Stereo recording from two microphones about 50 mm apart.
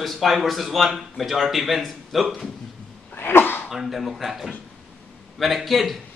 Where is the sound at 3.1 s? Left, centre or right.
Left.